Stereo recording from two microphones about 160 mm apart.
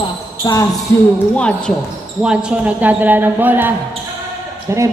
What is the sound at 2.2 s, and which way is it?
A man's voice, 5° right (ahead or behind).